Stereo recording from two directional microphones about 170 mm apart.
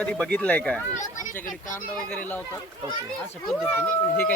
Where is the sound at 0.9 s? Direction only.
45° left (ahead or behind).